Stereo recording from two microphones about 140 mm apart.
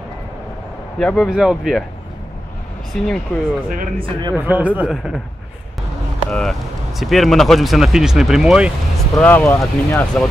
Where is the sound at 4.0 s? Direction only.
35° right (ahead or behind).